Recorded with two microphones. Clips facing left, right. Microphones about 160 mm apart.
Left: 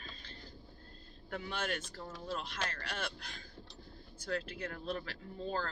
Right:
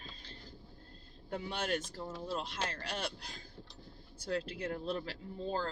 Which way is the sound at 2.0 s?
30° right (ahead or behind).